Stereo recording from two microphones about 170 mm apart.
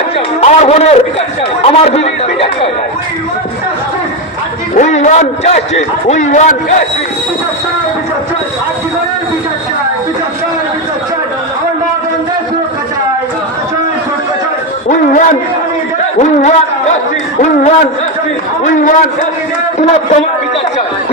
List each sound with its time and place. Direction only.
0.4 s a man's voice: 40° left (ahead or behind)
4.7 s a man's voice: 45° left (ahead or behind)
14.8 s a man's voice: 45° left (ahead or behind)